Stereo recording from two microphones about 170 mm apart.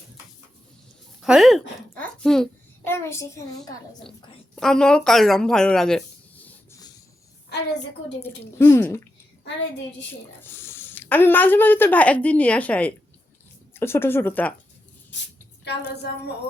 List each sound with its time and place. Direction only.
1.2 s speech: centre (ahead or behind)
2.0 s a sound: 5° left (ahead or behind)
2.8 s a child's voice: 15° left (ahead or behind)
4.5 s speech: 5° left (ahead or behind)
8.2 s speech: 15° left (ahead or behind)
10.4 s speech: 15° left (ahead or behind)